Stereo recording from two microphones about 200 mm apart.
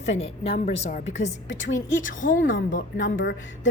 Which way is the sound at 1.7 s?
70° left (ahead or behind).